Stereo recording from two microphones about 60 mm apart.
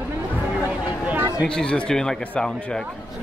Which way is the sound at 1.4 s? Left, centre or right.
Centre.